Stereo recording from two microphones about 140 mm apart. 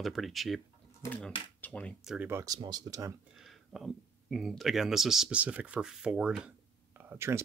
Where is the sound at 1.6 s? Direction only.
10° left (ahead or behind).